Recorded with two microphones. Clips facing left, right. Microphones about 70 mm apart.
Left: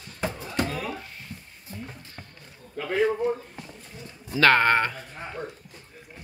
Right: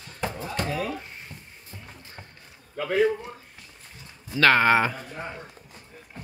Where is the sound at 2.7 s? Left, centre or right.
Centre.